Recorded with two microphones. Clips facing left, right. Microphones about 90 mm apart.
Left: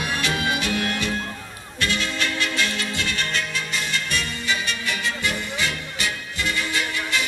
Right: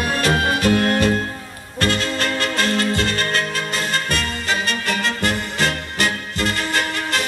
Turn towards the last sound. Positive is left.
turn(degrees=-45)  # may be behind; listen again after turning